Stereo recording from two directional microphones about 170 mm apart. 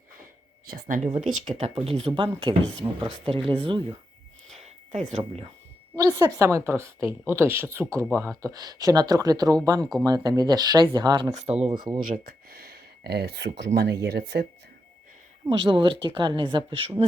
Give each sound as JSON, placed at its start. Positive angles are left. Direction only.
{"t": 0.7, "sound": "speech", "side_deg": -50}
{"t": 4.5, "sound": "a sound", "side_deg": -40}
{"t": 6.0, "sound": "a woman's voice", "side_deg": -20}
{"t": 11.3, "sound": "speech", "side_deg": -35}
{"t": 12.0, "sound": "speech", "side_deg": -55}
{"t": 13.7, "sound": "speech", "side_deg": -75}
{"t": 15.4, "sound": "speech", "side_deg": -30}